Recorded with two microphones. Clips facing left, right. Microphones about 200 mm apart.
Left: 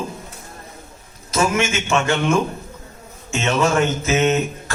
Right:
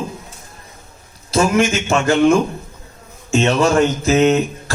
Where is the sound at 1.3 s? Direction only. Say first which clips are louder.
Right 4 dB; 35° right (ahead or behind).